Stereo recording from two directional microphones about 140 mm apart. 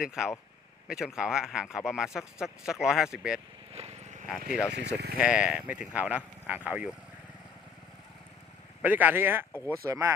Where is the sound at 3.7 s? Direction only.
50° right (ahead or behind).